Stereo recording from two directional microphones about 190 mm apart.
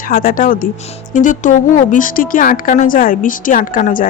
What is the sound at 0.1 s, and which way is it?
A woman's voice, 50° left (ahead or behind).